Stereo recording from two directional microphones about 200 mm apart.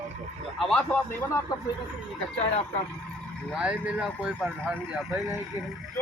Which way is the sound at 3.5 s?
5° right (ahead or behind).